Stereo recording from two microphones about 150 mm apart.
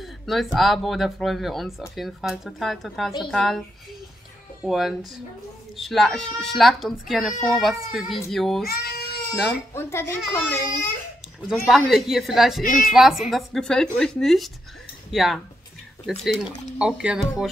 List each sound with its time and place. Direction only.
0.0 s speech: centre (ahead or behind)
4.6 s speech: centre (ahead or behind)
8.6 s speech: 90° left
9.3 s speech: centre (ahead or behind)
9.8 s a child's voice: 15° left (ahead or behind)
11.4 s speech: centre (ahead or behind)